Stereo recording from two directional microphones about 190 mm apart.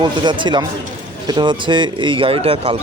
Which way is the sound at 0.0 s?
25° right (ahead or behind).